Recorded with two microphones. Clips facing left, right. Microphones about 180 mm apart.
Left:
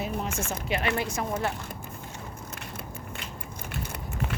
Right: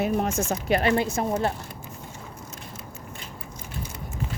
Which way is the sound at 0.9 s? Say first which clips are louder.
Right 5 dB; 25° right (ahead or behind).